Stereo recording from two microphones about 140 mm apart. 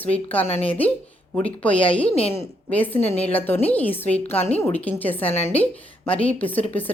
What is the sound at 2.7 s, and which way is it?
Speech, 10° left (ahead or behind).